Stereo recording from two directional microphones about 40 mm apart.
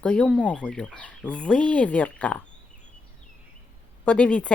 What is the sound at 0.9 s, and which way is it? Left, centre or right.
Speech, left.